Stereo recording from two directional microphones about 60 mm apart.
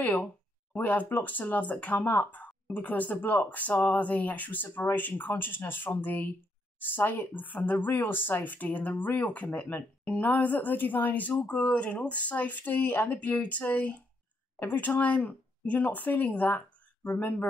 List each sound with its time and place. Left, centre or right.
0.0 s speech: left